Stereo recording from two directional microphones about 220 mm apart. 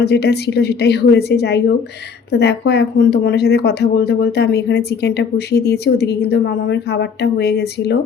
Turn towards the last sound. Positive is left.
turn(degrees=50)  # may be behind; listen again after turning